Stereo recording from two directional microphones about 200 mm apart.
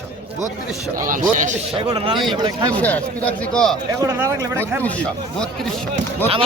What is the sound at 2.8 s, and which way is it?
Speech, 5° left (ahead or behind).